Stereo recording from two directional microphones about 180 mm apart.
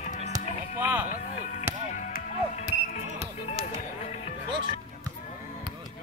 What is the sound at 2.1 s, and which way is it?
Music, 40° left (ahead or behind).